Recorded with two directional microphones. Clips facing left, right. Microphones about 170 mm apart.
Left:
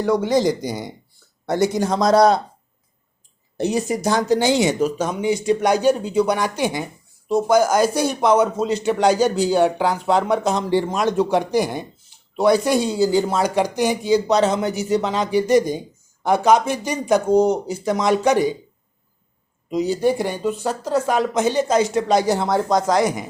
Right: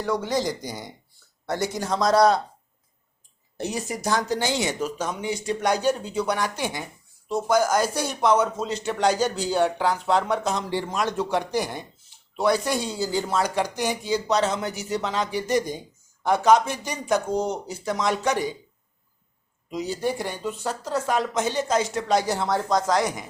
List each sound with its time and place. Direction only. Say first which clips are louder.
0.0 s speech: left 7 dB; 15° left (ahead or behind)
3.6 s speech: left 8 dB; 20° left (ahead or behind)
10.5 s speech: left 7 dB; 25° left (ahead or behind)
19.7 s speech: left 8 dB; 15° left (ahead or behind)